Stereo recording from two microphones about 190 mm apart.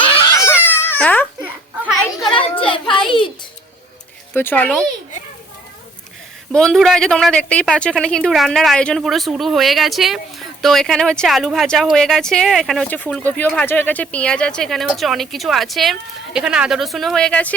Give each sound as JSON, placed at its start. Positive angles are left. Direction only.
{"t": 0.1, "sound": "a sound", "side_deg": 25}
{"t": 0.3, "sound": "cat", "side_deg": 15}
{"t": 1.4, "sound": "children playing", "side_deg": -10}
{"t": 2.3, "sound": "a sound", "side_deg": 30}
{"t": 4.4, "sound": "speech", "side_deg": 10}
{"t": 6.5, "sound": "speech", "side_deg": 5}